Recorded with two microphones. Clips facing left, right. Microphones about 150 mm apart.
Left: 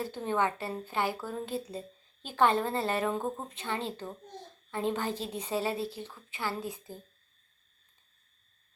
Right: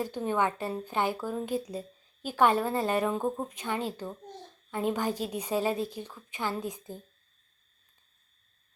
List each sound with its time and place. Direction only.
0.0 s a woman's voice: 15° right (ahead or behind)